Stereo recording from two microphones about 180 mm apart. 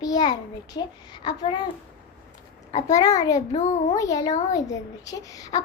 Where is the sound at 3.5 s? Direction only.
40° left (ahead or behind).